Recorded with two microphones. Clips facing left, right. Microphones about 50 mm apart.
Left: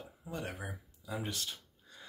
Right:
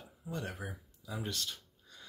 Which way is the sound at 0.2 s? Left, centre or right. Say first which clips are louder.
Right 1 dB; centre.